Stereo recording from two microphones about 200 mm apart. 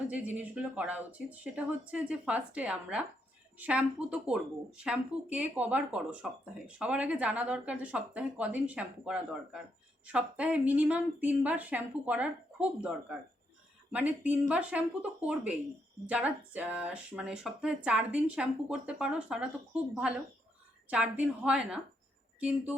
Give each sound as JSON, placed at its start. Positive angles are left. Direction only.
{"t": 0.1, "sound": "a woman's voice", "side_deg": -5}